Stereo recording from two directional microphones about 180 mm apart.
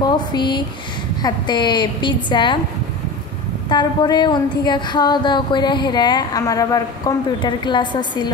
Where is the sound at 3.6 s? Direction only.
25° left (ahead or behind).